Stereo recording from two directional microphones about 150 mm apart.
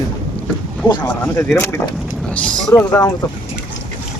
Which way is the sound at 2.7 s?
25° left (ahead or behind).